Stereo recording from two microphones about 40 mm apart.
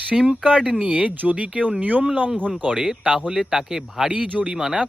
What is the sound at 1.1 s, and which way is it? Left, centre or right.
Speech, right.